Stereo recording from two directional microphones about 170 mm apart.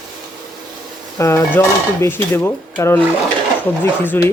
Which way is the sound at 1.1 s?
20° left (ahead or behind).